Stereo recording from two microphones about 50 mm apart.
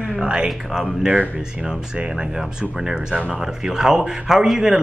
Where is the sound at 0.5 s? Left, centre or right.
Centre.